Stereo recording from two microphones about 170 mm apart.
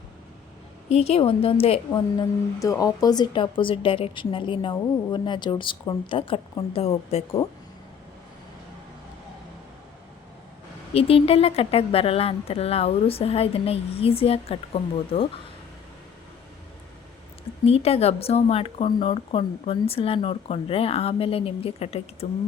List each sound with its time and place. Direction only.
0.9 s a woman's voice: 35° left (ahead or behind)
10.9 s speech: 35° left (ahead or behind)
17.7 s speech: 35° left (ahead or behind)